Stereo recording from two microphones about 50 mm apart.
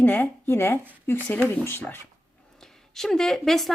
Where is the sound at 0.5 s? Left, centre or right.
Left.